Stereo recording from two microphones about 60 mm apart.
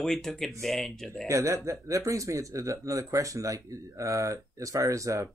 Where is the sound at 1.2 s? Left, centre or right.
Right.